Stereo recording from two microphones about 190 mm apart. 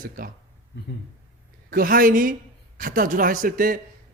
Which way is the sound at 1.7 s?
50° right (ahead or behind).